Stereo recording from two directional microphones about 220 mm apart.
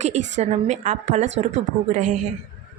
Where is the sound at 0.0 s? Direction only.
30° right (ahead or behind).